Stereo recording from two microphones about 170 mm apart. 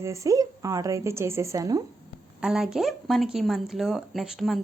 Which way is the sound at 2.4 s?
5° right (ahead or behind).